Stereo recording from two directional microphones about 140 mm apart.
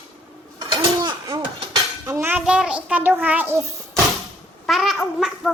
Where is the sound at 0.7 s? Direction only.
30° right (ahead or behind).